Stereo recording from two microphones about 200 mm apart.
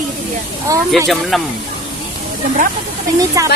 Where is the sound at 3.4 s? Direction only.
15° right (ahead or behind).